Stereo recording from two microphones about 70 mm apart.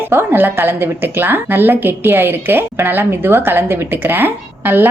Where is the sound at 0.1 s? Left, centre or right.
Right.